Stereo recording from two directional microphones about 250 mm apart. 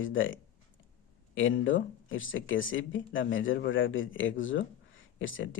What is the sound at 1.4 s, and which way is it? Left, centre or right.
Speech, left.